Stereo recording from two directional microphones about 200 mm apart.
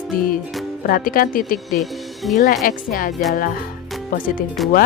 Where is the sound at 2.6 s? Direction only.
45° left (ahead or behind).